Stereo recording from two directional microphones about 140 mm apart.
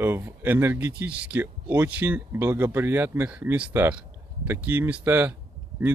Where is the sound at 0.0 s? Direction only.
15° right (ahead or behind).